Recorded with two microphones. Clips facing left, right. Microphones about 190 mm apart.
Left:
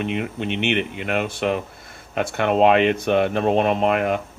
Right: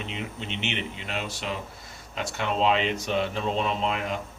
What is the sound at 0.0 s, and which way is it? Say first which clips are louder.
Speech: left 10 dB; 60° left (ahead or behind).